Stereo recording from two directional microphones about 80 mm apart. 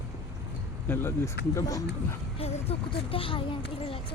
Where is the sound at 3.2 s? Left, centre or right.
Left.